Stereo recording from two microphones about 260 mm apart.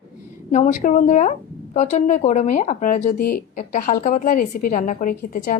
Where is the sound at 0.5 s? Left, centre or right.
Left.